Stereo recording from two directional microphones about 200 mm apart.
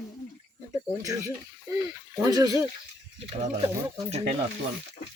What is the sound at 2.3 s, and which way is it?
Speech, 20° right (ahead or behind).